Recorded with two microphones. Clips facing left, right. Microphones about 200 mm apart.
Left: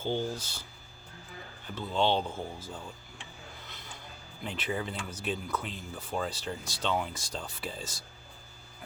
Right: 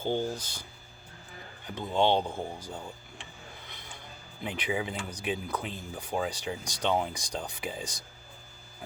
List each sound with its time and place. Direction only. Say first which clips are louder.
0.0 s speech: right 2 dB; 15° right (ahead or behind)
4.4 s speech: right 2 dB; 15° right (ahead or behind)